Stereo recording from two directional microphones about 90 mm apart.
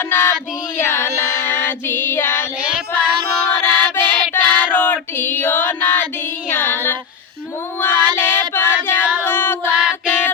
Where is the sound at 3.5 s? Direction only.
20° left (ahead or behind).